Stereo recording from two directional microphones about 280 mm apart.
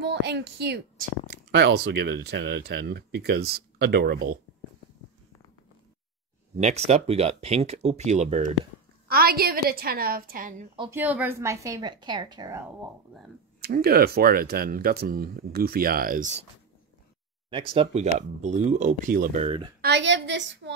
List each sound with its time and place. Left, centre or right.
0.0 s speech: right
6.6 s speech: right
10.8 s a woman's voice: centre
13.6 s speech: right
17.5 s speech: centre
19.8 s speech: right